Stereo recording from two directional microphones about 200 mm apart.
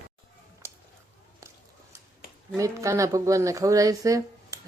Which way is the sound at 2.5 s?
15° right (ahead or behind).